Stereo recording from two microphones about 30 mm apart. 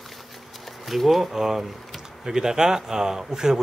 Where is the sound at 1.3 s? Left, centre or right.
Centre.